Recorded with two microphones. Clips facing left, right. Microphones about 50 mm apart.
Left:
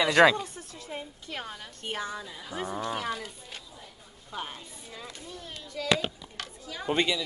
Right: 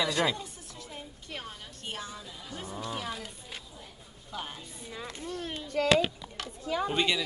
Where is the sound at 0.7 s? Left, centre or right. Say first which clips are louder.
Left 5 dB; left.